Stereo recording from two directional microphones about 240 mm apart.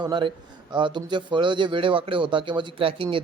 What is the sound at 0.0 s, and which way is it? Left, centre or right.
Speech, centre.